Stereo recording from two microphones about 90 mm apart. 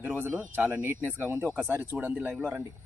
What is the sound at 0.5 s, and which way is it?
Speech, 20° right (ahead or behind).